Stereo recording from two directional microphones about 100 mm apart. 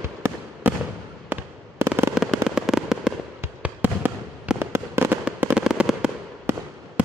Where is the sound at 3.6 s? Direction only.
15° right (ahead or behind).